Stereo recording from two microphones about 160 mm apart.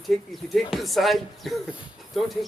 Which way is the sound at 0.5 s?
Centre (ahead or behind).